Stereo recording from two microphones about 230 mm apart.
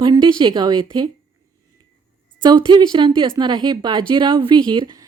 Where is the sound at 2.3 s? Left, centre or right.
Centre.